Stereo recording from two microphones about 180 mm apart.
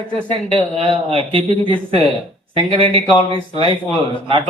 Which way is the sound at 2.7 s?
30° right (ahead or behind).